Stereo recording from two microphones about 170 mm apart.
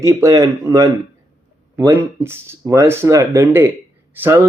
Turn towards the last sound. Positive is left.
turn(degrees=-10)  # may be behind; listen again after turning